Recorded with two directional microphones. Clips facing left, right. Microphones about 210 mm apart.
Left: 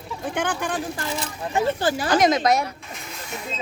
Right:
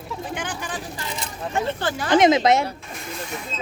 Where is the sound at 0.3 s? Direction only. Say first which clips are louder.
Left 5 dB; 55° left (ahead or behind).